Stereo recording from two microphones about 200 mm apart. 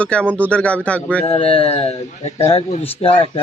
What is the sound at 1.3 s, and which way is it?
A man's voice, 30° left (ahead or behind).